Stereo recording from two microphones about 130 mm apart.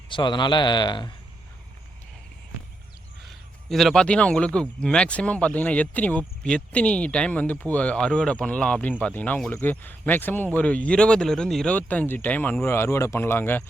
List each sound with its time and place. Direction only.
0.1 s a man's voice: 35° left (ahead or behind)
3.7 s speech: centre (ahead or behind)